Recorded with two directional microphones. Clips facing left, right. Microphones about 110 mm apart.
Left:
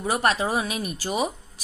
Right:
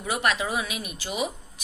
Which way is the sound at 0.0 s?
35° left (ahead or behind).